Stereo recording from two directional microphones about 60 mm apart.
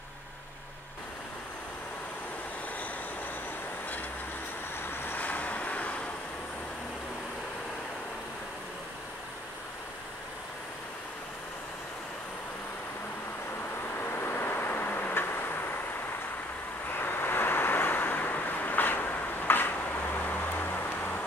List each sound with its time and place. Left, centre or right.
4.9 s vehicle: left
13.9 s vehicle: left
17.0 s vehicle: left
20.2 s music: left